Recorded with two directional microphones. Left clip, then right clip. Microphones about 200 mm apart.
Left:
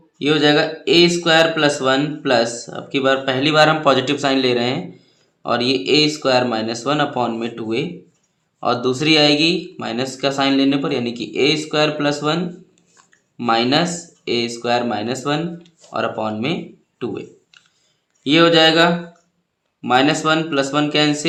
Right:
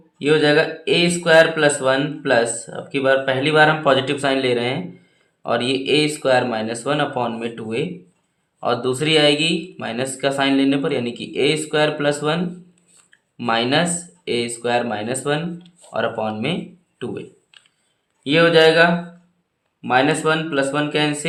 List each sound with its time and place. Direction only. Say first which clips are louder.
0.2 s speech: even; 15° left (ahead or behind)
17.5 s a sound: even; centre (ahead or behind)
18.2 s speech: left 1 dB; 20° left (ahead or behind)